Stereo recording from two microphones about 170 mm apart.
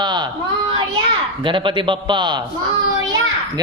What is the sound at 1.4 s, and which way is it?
Speech, 30° right (ahead or behind).